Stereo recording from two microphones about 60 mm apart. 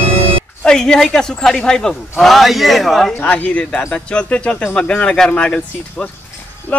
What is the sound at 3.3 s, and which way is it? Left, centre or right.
Speech, left.